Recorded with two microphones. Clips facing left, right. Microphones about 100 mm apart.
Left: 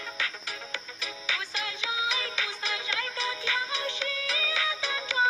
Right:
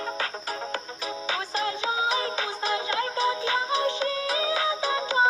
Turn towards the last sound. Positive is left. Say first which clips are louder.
# right 5 dB
turn(degrees=-35)  # may be behind; listen again after turning